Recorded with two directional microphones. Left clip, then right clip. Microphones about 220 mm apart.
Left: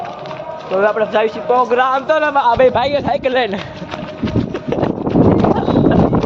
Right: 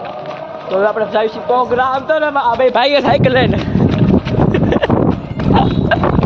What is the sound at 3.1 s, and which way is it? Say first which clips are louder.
Speech: right 4 dB; 25° right (ahead or behind).